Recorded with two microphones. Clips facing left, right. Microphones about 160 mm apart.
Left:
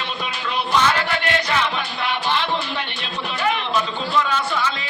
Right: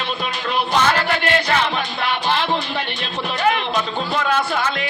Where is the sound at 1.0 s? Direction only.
45° right (ahead or behind).